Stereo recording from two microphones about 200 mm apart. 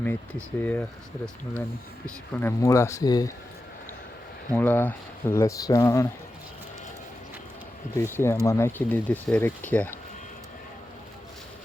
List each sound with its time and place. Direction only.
0.6 s speech: 10° left (ahead or behind)
4.5 s speech: 10° left (ahead or behind)
7.9 s speech: 10° left (ahead or behind)